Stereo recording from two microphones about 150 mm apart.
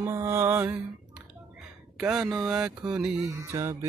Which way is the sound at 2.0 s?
5° right (ahead or behind).